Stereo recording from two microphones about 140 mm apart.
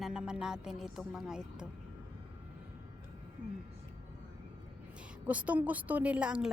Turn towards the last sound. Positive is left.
turn(degrees=-5)  # may be behind; listen again after turning